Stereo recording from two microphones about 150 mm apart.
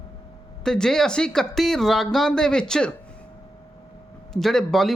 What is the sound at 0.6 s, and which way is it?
Speech, 5° left (ahead or behind).